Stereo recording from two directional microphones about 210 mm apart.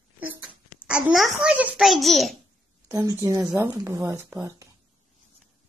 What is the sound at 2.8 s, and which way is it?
Speech, 15° right (ahead or behind).